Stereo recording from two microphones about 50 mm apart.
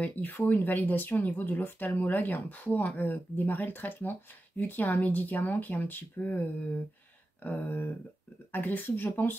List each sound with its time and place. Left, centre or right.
0.0 s speech: left
7.4 s speech: left